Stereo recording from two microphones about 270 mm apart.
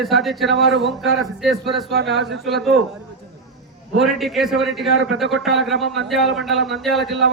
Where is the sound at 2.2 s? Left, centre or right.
Centre.